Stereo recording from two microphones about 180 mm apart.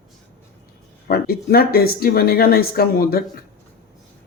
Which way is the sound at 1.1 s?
60° left (ahead or behind).